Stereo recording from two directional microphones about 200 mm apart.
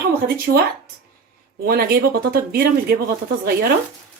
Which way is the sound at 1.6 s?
50° right (ahead or behind).